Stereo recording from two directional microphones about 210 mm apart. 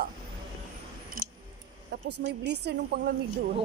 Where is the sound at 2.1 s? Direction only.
55° right (ahead or behind).